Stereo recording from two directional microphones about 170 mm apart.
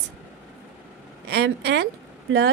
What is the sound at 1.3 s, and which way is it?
Speech, 75° right (ahead or behind).